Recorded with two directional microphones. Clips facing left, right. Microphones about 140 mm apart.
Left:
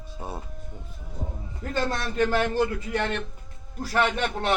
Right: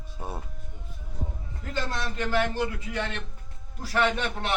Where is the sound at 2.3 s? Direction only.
45° left (ahead or behind).